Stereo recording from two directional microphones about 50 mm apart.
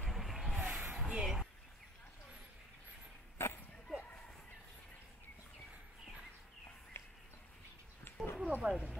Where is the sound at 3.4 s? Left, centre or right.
Left.